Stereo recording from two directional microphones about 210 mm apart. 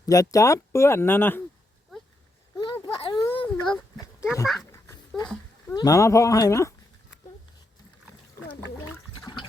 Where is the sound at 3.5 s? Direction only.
5° left (ahead or behind).